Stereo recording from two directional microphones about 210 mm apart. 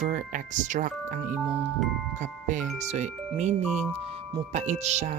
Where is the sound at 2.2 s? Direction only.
40° right (ahead or behind).